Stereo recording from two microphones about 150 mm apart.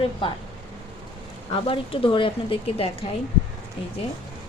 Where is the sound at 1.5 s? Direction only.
35° left (ahead or behind).